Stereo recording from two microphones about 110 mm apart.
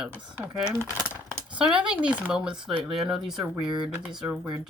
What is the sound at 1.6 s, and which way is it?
Speech, 10° right (ahead or behind).